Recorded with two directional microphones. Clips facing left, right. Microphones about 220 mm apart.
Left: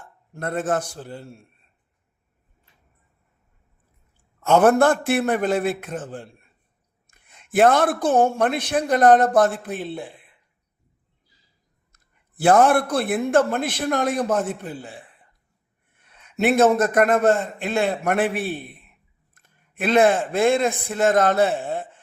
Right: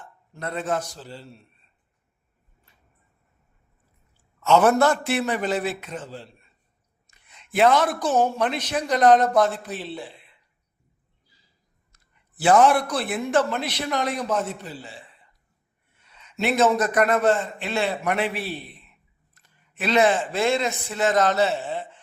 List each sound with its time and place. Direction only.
0.0 s a man's voice: 50° left (ahead or behind)
4.4 s speech: 55° left (ahead or behind)
12.4 s a man's voice: 50° left (ahead or behind)